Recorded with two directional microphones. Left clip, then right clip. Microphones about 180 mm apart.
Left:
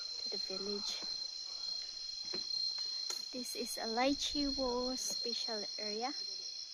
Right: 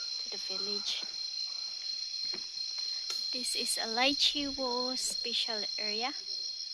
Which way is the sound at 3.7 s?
Centre (ahead or behind).